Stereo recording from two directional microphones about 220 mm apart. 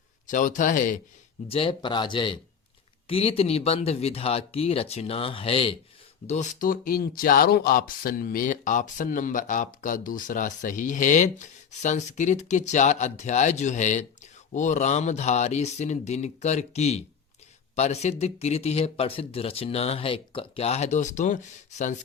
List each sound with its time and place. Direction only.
0.3 s speech: 35° left (ahead or behind)
1.5 s speech: 25° left (ahead or behind)